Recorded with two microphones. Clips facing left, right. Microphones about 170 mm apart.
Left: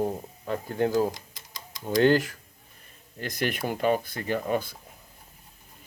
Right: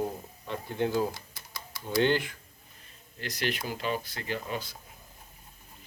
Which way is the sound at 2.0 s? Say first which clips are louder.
Left 5 dB; 40° left (ahead or behind).